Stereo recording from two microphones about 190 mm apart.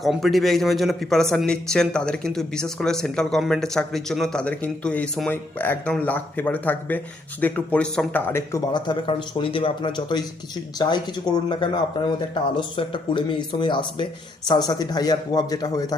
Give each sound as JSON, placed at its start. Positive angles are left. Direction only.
{"t": 0.0, "sound": "a man's voice", "side_deg": 0}